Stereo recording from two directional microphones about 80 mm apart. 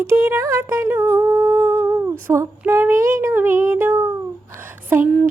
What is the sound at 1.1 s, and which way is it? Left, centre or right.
Female singing, right.